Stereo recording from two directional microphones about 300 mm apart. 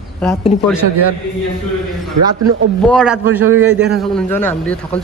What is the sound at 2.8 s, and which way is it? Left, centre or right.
A man's voice, centre.